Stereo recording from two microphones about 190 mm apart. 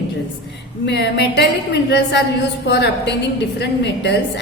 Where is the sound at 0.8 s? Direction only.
65° left (ahead or behind).